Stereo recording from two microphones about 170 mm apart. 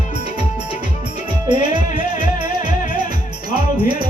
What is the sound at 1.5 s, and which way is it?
Music, 30° right (ahead or behind).